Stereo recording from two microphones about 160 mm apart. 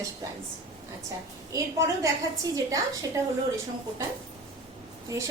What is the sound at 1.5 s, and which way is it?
A woman's voice, 20° right (ahead or behind).